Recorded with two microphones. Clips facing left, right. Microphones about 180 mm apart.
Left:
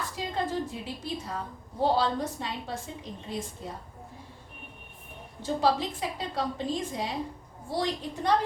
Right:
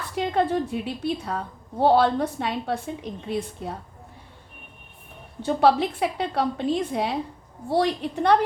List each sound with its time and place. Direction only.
0.2 s a woman's voice: 65° right (ahead or behind)
5.4 s a woman's voice: 65° right (ahead or behind)